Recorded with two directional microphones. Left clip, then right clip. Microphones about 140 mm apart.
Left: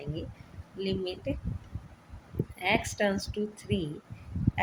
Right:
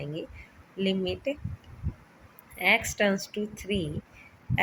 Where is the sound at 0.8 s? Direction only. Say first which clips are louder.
Right 4 dB; 55° left (ahead or behind).